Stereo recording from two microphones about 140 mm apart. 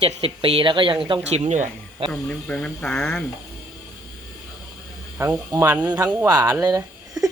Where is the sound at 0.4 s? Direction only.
40° right (ahead or behind).